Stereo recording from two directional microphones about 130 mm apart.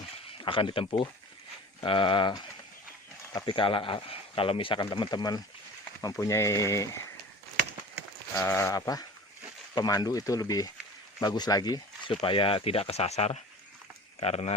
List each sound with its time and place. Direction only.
0.3 s speech: 40° left (ahead or behind)
3.4 s speech: 40° left (ahead or behind); by 6.9 s 25° left (ahead or behind)
8.4 s speech: 15° left (ahead or behind)
12.2 s speech: 40° left (ahead or behind)